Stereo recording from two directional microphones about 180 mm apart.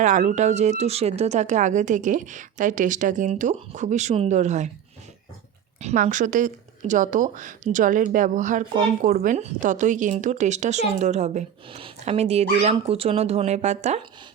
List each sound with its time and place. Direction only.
0.0 s speech: 45° right (ahead or behind)
5.8 s speech: 45° right (ahead or behind)